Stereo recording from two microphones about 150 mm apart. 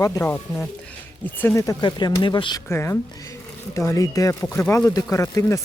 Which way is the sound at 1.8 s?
30° left (ahead or behind).